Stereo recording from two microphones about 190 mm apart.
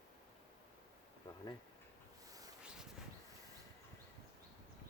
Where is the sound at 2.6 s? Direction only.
5° right (ahead or behind).